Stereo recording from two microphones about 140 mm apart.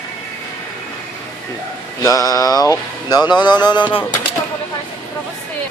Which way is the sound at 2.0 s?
25° left (ahead or behind).